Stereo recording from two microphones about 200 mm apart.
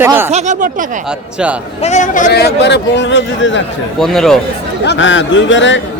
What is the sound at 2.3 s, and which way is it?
A man's voice, 55° left (ahead or behind).